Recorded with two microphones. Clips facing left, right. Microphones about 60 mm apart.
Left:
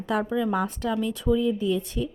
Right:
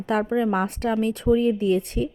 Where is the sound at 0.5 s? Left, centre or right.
Right.